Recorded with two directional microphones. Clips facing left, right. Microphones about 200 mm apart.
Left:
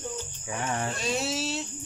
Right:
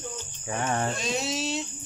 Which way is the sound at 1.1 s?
5° left (ahead or behind).